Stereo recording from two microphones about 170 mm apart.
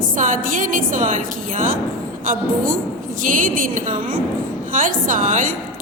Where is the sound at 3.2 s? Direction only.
50° right (ahead or behind).